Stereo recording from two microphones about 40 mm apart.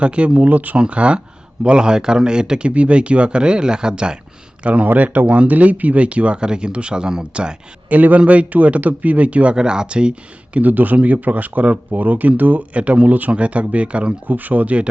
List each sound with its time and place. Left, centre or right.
0.0 s speech: right
0.3 s speech: right
0.8 s speech: right
4.6 s speech: right
7.9 s speech: right
8.2 s speech: right
10.6 s speech: right
14.3 s speech: right